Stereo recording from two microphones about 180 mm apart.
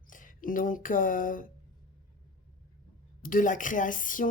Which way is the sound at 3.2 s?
50° left (ahead or behind).